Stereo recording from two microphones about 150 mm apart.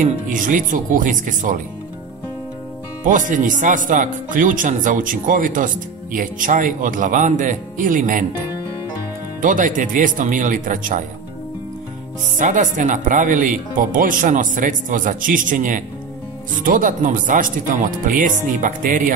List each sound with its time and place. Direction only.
0.0 s speech: 60° right (ahead or behind)
3.0 s speech: 60° right (ahead or behind)
9.4 s speech: 60° right (ahead or behind)
12.4 s speech: 55° right (ahead or behind)